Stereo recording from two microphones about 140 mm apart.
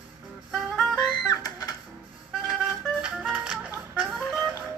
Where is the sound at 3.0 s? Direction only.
5° right (ahead or behind).